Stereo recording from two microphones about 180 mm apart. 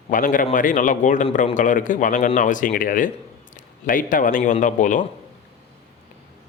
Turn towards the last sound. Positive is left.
turn(degrees=45)  # may be behind; listen again after turning